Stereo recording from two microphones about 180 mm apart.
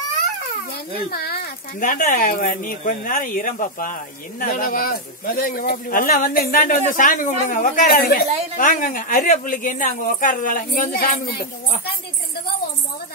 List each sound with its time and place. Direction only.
1.1 s speech: 60° left (ahead or behind)